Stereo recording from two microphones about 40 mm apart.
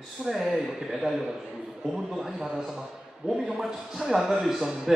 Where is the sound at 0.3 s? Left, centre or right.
Centre.